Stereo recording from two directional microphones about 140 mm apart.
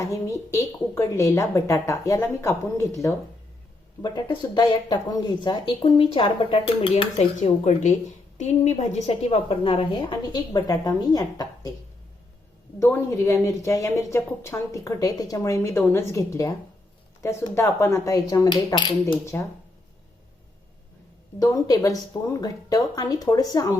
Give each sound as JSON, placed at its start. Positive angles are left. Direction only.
{"t": 0.0, "sound": "a woman's voice", "side_deg": 25}
{"t": 4.0, "sound": "speech", "side_deg": 30}
{"t": 12.8, "sound": "a woman's voice", "side_deg": 20}
{"t": 19.3, "sound": "speech", "side_deg": 15}
{"t": 21.3, "sound": "a woman's voice", "side_deg": 25}